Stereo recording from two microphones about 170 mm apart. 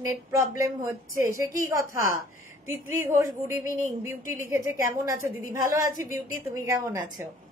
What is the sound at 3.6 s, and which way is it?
A woman's voice, 15° right (ahead or behind).